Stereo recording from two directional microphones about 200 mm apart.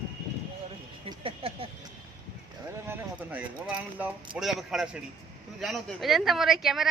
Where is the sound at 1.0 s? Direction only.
25° right (ahead or behind).